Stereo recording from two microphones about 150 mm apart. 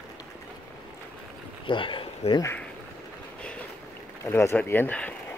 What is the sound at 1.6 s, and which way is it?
Speech, 35° left (ahead or behind).